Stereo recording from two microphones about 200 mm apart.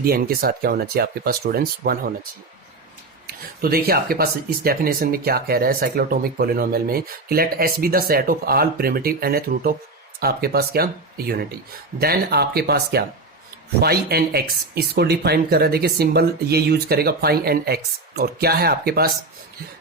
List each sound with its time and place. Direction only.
0.0 s speech: 50° right (ahead or behind)
3.2 s speech: 50° right (ahead or behind)